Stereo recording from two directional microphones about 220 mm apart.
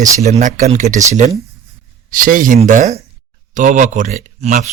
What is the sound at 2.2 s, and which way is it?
A man's voice, 40° right (ahead or behind).